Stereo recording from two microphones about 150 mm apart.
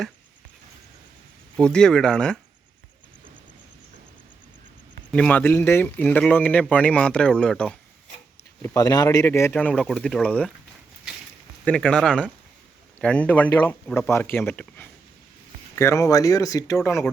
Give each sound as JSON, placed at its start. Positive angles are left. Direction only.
{"t": 1.5, "sound": "speech", "side_deg": 5}
{"t": 5.1, "sound": "speech", "side_deg": 10}
{"t": 8.6, "sound": "speech", "side_deg": 25}
{"t": 11.6, "sound": "speech", "side_deg": 5}